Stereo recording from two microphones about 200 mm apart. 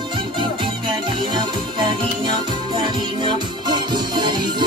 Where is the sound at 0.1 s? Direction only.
25° right (ahead or behind).